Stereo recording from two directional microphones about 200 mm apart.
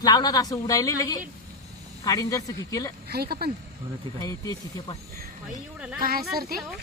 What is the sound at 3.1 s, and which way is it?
Speech, 50° right (ahead or behind).